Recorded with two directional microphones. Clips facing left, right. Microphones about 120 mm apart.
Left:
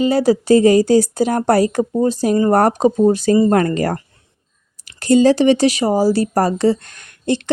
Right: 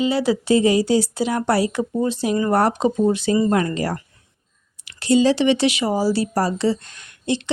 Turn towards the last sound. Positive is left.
turn(degrees=50)  # may be behind; listen again after turning